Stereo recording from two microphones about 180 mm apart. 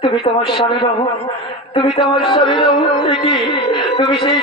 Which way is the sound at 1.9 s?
25° left (ahead or behind).